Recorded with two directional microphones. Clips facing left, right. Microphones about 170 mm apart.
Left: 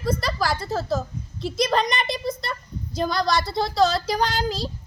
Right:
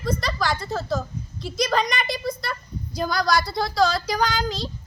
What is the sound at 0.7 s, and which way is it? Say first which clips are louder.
Child singing: left 3 dB; 25° left (ahead or behind).